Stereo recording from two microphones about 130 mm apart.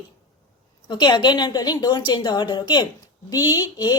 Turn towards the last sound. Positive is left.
turn(degrees=30)  # may be behind; listen again after turning